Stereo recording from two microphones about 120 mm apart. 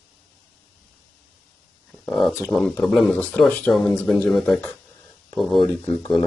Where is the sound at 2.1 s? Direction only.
Centre (ahead or behind).